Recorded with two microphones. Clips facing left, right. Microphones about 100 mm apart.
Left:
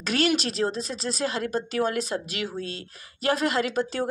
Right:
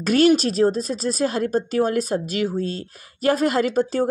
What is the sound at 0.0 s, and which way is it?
Speech, 45° right (ahead or behind).